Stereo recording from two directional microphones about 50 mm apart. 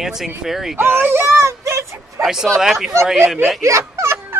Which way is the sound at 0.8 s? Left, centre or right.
Right.